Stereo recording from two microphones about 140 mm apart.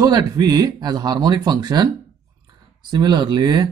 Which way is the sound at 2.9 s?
30° right (ahead or behind).